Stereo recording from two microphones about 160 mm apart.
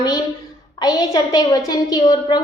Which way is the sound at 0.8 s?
25° left (ahead or behind).